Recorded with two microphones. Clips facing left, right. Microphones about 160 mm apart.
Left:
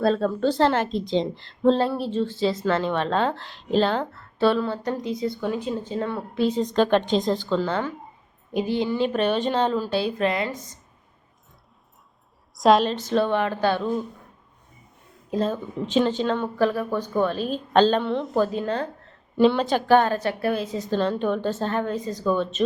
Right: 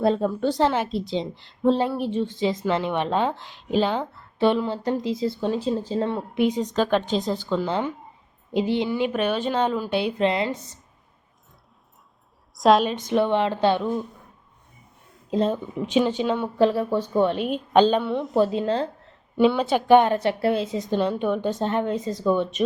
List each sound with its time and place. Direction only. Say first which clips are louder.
0.0 s a woman's voice: even; 15° right (ahead or behind)
8.9 s a woman's voice: left 1 dB; 10° right (ahead or behind)
12.5 s a woman's voice: even; centre (ahead or behind)
12.9 s a woman's voice: right 1 dB; 15° right (ahead or behind)
15.3 s a woman's voice: right 2 dB; 20° right (ahead or behind)
16.6 s a woman's voice: right 5 dB; 25° right (ahead or behind)
17.7 s a woman's voice: right 1 dB; 10° right (ahead or behind)
18.3 s a woman's voice: right 4 dB; 25° right (ahead or behind)
19.4 s a woman's voice: even; 5° right (ahead or behind)